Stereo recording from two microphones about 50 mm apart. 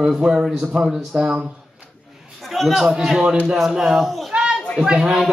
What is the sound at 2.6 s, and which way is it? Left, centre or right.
Speech, centre.